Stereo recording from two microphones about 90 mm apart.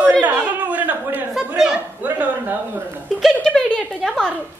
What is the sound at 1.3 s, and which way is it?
Speech, 5° right (ahead or behind).